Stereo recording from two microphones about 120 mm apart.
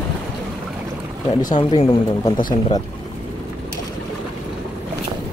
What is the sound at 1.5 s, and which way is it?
Speech, 40° left (ahead or behind).